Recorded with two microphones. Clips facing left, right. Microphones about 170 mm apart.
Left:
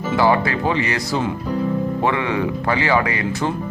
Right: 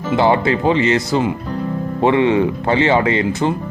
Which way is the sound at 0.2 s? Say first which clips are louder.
Right 2 dB; 20° right (ahead or behind).